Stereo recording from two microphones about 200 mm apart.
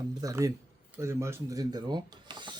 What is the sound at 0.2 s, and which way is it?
Speech, 15° right (ahead or behind).